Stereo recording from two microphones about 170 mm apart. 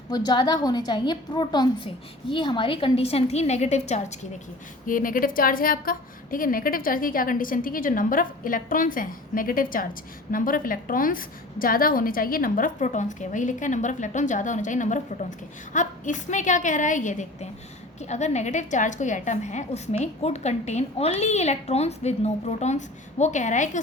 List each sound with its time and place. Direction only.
0.1 s a woman's voice: 25° left (ahead or behind); by 4.3 s 40° left (ahead or behind)
4.9 s a woman's voice: 55° left (ahead or behind)